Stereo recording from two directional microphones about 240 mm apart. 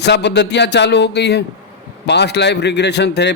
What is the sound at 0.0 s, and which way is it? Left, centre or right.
A man's voice, left.